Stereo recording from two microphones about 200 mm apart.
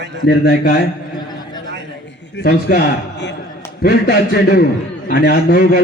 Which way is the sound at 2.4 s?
50° left (ahead or behind).